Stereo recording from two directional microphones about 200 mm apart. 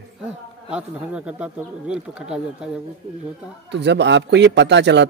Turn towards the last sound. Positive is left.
turn(degrees=-60)  # may be behind; listen again after turning